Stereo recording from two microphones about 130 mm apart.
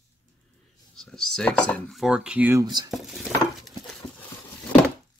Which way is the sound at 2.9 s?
Centre (ahead or behind).